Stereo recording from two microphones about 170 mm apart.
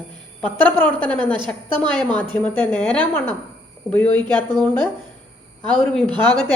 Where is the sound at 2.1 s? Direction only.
10° left (ahead or behind).